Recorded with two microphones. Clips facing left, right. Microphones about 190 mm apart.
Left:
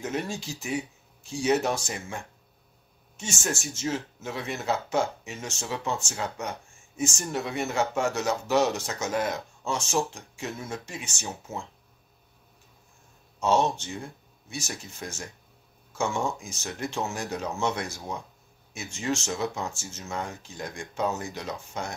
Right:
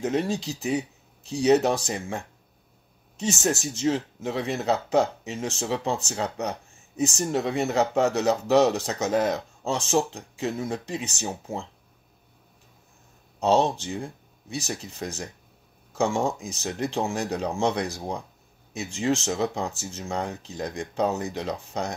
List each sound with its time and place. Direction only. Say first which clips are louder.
0.0 s speech: right 6 dB; 35° right (ahead or behind)
13.4 s speech: right 3 dB; 35° right (ahead or behind)